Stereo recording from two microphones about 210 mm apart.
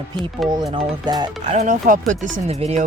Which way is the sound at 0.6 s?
20° right (ahead or behind).